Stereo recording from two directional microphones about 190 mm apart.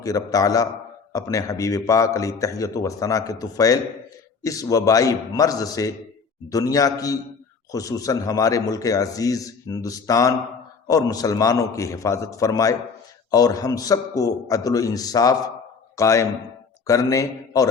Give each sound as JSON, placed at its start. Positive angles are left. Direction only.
{"t": 0.0, "sound": "a man's voice", "side_deg": 20}